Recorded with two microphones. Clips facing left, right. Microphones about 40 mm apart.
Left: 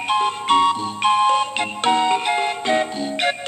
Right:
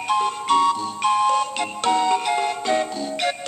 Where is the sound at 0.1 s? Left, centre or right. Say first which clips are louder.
Left 2 dB; left.